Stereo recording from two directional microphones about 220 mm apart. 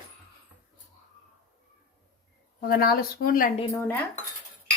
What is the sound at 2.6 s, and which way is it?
Speech, 40° left (ahead or behind).